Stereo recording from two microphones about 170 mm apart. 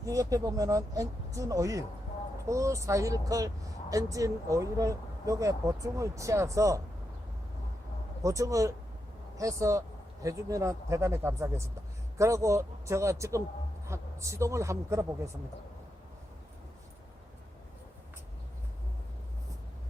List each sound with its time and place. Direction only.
0.0 s speech: 20° right (ahead or behind)
8.2 s speech: 20° right (ahead or behind)